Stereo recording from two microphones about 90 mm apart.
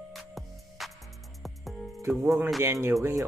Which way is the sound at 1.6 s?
Centre (ahead or behind).